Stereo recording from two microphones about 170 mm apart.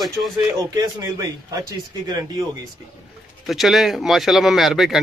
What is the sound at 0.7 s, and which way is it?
A man's voice, 20° right (ahead or behind).